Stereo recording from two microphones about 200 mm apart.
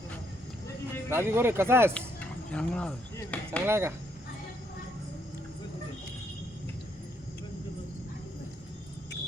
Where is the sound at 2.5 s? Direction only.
5° left (ahead or behind).